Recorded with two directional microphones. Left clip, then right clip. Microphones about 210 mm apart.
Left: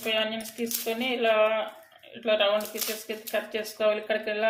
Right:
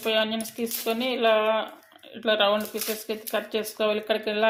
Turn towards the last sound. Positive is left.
turn(degrees=-35)  # may be behind; listen again after turning